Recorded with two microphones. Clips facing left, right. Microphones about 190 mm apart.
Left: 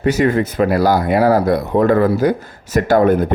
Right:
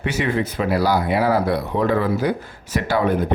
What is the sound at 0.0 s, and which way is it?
Speech, 40° left (ahead or behind).